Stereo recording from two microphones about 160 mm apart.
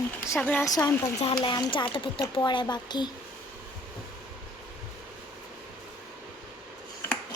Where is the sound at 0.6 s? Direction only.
20° left (ahead or behind).